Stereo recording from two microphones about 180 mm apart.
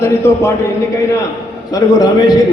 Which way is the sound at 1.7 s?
20° left (ahead or behind).